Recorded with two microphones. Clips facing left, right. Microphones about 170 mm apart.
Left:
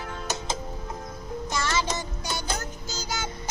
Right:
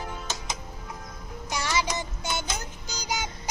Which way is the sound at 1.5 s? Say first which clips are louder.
Even; 10° right (ahead or behind).